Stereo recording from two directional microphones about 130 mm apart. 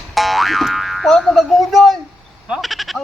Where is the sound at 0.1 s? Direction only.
Centre (ahead or behind).